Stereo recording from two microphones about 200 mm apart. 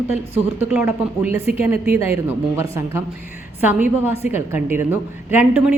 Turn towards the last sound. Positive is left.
turn(degrees=-10)  # may be behind; listen again after turning